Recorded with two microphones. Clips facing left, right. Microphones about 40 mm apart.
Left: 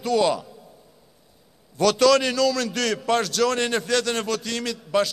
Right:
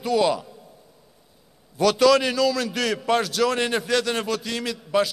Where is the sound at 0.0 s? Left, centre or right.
Centre.